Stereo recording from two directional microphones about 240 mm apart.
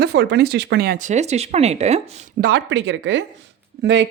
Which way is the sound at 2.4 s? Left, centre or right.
Right.